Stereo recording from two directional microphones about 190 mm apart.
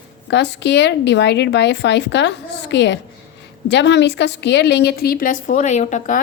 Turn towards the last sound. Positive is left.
turn(degrees=40)  # may be behind; listen again after turning